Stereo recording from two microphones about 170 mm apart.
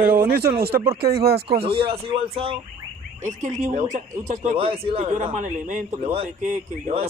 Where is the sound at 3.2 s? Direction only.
45° right (ahead or behind).